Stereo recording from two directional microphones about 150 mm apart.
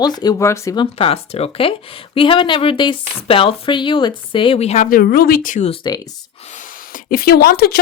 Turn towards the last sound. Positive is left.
turn(degrees=90)